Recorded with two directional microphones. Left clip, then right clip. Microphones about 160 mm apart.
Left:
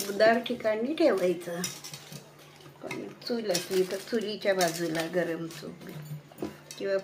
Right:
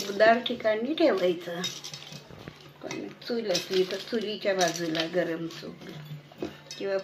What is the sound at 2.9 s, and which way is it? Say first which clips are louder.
Speech: even; 10° left (ahead or behind).